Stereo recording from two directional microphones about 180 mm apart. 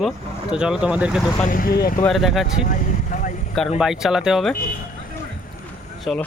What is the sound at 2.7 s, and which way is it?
Vehicle, 45° left (ahead or behind).